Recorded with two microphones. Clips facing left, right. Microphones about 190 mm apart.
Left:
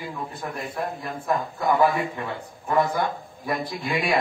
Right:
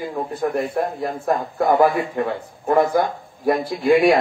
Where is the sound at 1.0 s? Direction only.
45° right (ahead or behind).